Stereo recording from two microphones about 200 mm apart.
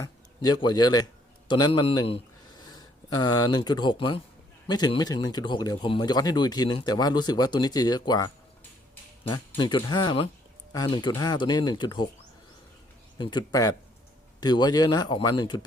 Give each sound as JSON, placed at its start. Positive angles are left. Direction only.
{"t": 0.0, "sound": "a man's voice", "side_deg": 20}
{"t": 9.6, "sound": "speech", "side_deg": 20}
{"t": 13.1, "sound": "speech", "side_deg": 20}